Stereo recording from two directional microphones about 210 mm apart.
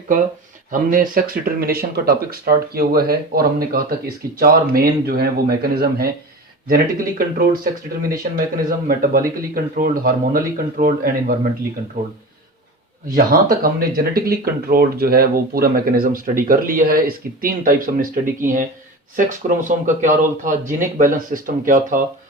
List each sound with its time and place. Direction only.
0.7 s speech: 40° right (ahead or behind)
8.9 s speech: 45° right (ahead or behind)
13.1 s speech: 45° right (ahead or behind)